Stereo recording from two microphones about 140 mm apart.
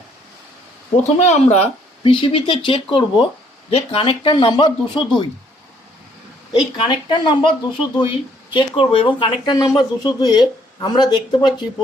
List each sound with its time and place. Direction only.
1.2 s speech: 55° left (ahead or behind); by 5.2 s 35° left (ahead or behind)
6.8 s speech: 35° left (ahead or behind)